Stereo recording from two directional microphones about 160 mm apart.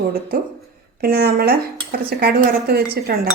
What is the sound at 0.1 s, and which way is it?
Speech, 70° right (ahead or behind).